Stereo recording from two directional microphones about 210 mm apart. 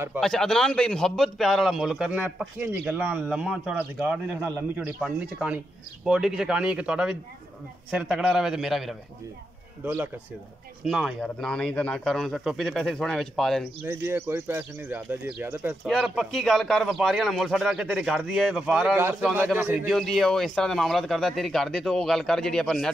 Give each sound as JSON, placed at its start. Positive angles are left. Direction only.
{"t": 0.2, "sound": "a man's voice", "side_deg": 0}
{"t": 10.8, "sound": "a man's voice", "side_deg": -5}
{"t": 13.8, "sound": "speech", "side_deg": -10}
{"t": 15.9, "sound": "a man's voice", "side_deg": 0}